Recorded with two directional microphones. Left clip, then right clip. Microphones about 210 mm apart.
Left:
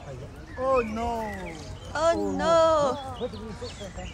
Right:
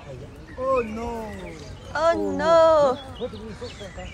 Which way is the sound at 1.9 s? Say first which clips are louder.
Right 3 dB; 15° left (ahead or behind).